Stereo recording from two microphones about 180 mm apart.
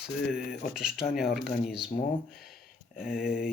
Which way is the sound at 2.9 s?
55° left (ahead or behind).